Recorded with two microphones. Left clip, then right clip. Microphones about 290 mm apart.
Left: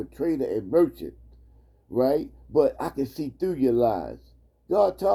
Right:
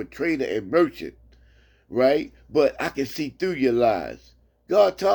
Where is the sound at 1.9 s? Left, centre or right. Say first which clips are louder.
Right 3 dB; right.